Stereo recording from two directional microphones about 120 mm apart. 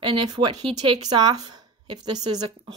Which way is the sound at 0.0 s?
40° right (ahead or behind).